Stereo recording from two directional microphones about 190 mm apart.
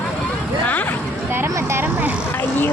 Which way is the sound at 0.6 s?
10° left (ahead or behind).